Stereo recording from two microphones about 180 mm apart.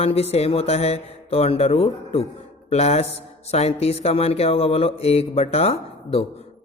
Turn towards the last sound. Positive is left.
turn(degrees=35)  # may be behind; listen again after turning